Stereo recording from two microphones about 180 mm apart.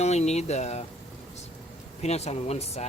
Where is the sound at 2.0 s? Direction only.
35° left (ahead or behind).